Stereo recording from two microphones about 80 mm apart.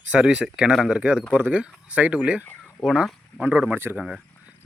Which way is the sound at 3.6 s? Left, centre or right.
Right.